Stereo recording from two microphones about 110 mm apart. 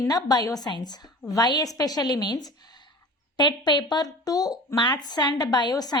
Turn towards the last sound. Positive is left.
turn(degrees=35)  # may be behind; listen again after turning